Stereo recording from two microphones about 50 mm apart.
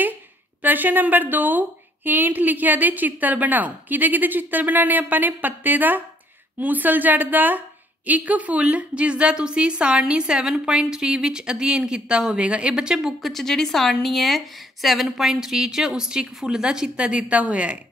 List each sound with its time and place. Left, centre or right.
0.6 s a woman's voice: right; by 13.1 s centre
13.2 s a woman's voice: centre; by 17.7 s right